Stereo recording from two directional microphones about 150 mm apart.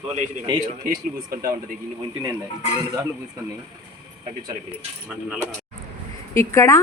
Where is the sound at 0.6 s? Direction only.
70° right (ahead or behind).